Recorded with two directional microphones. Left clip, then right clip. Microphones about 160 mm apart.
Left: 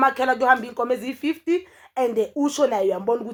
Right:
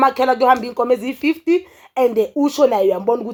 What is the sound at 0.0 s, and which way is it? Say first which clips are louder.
Speech: right 5 dB; 25° right (ahead or behind).